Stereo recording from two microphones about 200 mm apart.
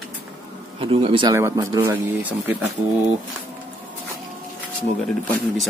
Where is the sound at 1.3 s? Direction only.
15° right (ahead or behind).